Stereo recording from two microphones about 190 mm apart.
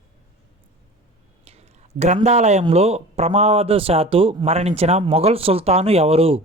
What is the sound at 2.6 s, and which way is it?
Speech, 35° right (ahead or behind).